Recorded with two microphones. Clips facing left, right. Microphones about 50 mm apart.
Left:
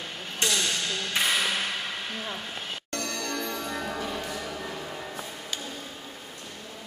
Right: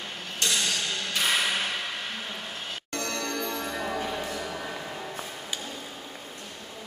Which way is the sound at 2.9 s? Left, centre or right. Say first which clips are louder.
Right 1 dB; centre.